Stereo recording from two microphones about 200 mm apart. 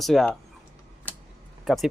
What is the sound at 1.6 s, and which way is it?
Speech, centre (ahead or behind).